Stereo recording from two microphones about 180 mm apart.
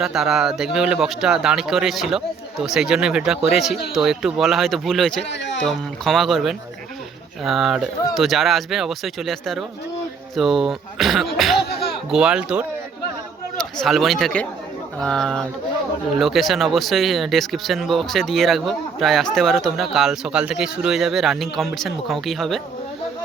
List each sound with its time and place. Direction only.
0.0 s speech: centre (ahead or behind)
5.3 s a sound: 75° left (ahead or behind)
5.6 s speech: centre (ahead or behind)